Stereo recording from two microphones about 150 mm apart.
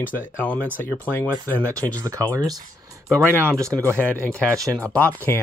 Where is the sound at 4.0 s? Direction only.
10° left (ahead or behind).